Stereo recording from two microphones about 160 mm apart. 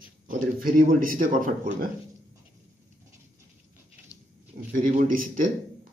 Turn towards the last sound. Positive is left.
turn(degrees=-55)  # may be behind; listen again after turning